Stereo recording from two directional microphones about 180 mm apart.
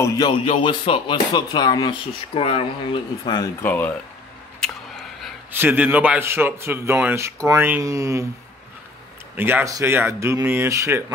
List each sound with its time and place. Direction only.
0.0 s speech: 20° left (ahead or behind)
3.6 s speech: 10° left (ahead or behind)
4.6 s a sound: centre (ahead or behind)
5.5 s a man's voice: 10° right (ahead or behind)
9.4 s a man's voice: 10° right (ahead or behind)